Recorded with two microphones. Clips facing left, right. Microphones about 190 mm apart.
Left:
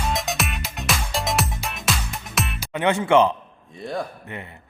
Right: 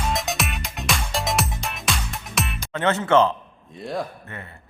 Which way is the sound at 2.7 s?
15° left (ahead or behind).